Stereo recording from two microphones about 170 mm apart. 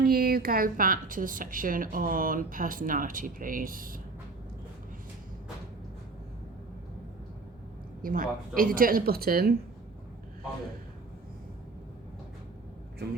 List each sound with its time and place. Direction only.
0.0 s a woman's voice: 60° right (ahead or behind)
8.0 s a woman's voice: 55° right (ahead or behind)